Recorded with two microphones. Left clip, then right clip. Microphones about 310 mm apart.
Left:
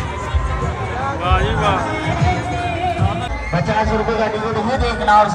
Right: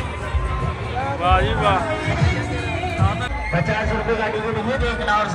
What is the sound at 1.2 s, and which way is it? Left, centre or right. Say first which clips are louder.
Speech: even; centre.